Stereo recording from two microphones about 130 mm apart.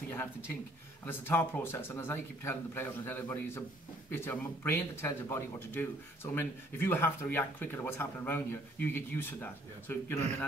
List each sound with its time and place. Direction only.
0.1 s speech: 15° left (ahead or behind)